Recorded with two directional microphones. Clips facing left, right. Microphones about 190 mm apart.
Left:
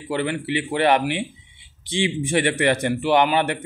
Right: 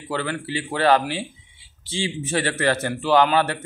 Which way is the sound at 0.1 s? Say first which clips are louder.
Left 3 dB; 15° left (ahead or behind).